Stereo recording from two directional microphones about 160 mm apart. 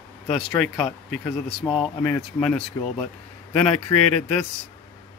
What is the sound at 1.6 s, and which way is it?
Speech, 10° left (ahead or behind).